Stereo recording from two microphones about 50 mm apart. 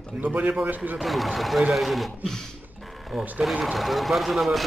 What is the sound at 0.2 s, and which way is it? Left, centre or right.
Speech, right.